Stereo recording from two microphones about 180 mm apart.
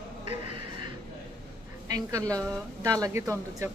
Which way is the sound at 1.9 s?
20° right (ahead or behind).